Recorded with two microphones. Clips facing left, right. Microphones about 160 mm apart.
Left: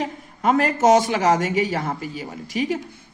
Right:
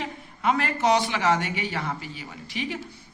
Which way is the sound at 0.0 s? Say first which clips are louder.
Left 4 dB; 40° left (ahead or behind).